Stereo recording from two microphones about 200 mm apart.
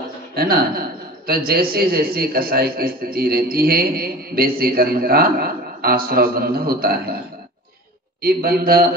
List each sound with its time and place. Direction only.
0.3 s a man's voice: 50° right (ahead or behind)
8.2 s a man's voice: 50° right (ahead or behind)